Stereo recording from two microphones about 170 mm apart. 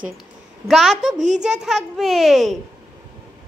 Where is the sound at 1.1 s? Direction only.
45° right (ahead or behind).